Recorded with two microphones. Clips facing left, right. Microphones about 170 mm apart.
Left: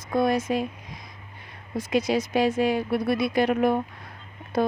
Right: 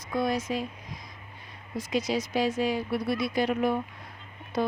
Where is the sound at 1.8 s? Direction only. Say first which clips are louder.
Left 5 dB; 55° left (ahead or behind).